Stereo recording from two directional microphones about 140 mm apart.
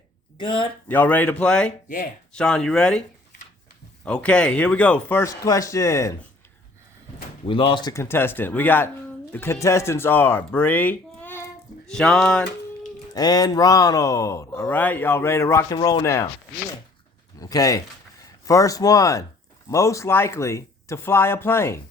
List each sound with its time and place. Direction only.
0.3 s speech: 35° left (ahead or behind)
0.9 s speech: 10° left (ahead or behind)
4.0 s speech: 5° left (ahead or behind)
5.5 s speech: 25° left (ahead or behind)
7.4 s speech: 35° left (ahead or behind)
7.9 s speech: 15° left (ahead or behind)
13.1 s speech: 25° left (ahead or behind)
17.4 s speech: 25° left (ahead or behind)